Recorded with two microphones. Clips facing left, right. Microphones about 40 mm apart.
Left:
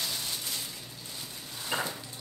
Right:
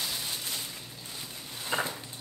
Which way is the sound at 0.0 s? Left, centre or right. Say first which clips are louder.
Even; centre.